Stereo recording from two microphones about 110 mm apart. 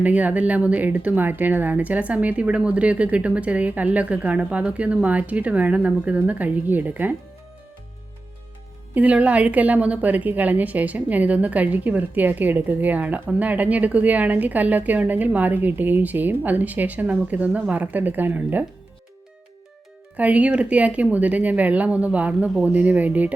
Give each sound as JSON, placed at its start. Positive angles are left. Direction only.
{"t": 0.0, "sound": "a woman's voice", "side_deg": -15}
{"t": 9.0, "sound": "a woman's voice", "side_deg": -10}
{"t": 20.1, "sound": "a woman's voice", "side_deg": -10}